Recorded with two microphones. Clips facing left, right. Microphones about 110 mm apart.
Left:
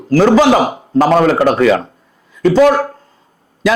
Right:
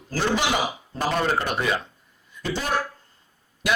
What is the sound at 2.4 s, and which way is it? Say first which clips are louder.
Speech: left 17 dB; 80° left.